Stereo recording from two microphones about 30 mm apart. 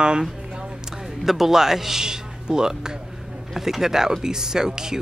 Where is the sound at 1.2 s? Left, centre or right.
Centre.